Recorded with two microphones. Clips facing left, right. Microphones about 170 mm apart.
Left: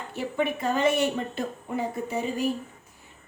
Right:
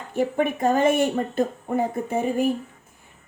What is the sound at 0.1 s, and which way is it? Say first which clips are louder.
Speech: right 6 dB; 50° right (ahead or behind).